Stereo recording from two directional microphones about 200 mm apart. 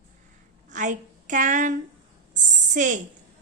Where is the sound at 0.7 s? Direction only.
40° right (ahead or behind).